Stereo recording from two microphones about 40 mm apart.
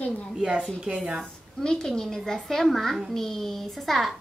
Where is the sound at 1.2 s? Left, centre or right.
Centre.